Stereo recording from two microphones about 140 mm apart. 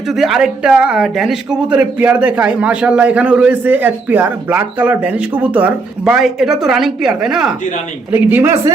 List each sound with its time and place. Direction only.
0.1 s speech: 5° right (ahead or behind)
8.3 s speech: 15° right (ahead or behind)